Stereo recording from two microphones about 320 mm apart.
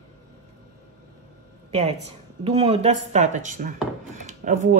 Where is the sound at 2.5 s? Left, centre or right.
Centre.